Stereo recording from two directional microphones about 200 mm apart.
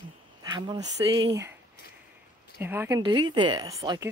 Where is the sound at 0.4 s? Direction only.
20° right (ahead or behind).